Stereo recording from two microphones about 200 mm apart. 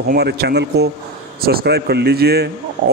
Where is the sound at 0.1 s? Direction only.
55° right (ahead or behind).